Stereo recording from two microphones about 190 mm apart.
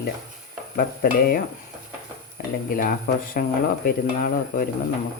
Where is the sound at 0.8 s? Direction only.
55° left (ahead or behind).